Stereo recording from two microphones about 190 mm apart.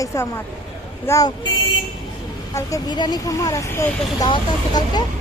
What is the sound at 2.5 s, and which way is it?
Speech, 20° left (ahead or behind).